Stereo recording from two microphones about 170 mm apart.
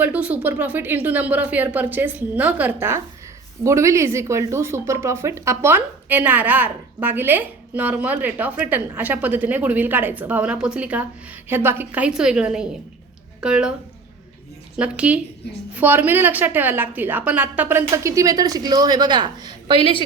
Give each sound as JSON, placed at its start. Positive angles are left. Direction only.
{"t": 0.0, "sound": "a woman's voice", "side_deg": -10}
{"t": 14.8, "sound": "a woman's voice", "side_deg": -5}